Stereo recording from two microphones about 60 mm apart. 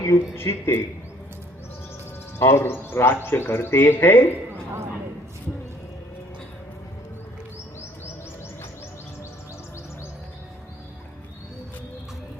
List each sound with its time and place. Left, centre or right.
0.0 s speech: left
2.4 s speech: left